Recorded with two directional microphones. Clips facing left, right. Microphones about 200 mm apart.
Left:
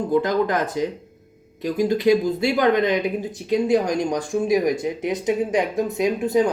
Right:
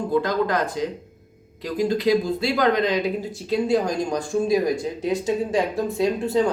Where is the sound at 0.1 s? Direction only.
20° left (ahead or behind).